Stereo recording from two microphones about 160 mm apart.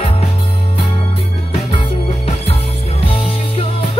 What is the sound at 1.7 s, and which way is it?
Music, 35° left (ahead or behind).